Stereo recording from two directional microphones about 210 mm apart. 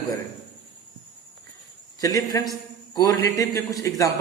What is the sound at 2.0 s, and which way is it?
A man's voice, 15° left (ahead or behind).